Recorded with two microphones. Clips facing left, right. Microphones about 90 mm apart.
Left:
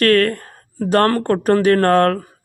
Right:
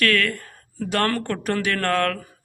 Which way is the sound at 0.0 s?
40° left (ahead or behind).